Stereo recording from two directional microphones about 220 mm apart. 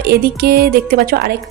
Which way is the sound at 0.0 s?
45° right (ahead or behind).